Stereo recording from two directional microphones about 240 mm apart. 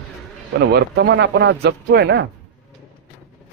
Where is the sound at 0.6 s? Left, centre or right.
Right.